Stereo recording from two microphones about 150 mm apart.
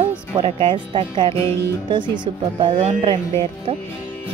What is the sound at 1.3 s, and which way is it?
Music, 15° left (ahead or behind).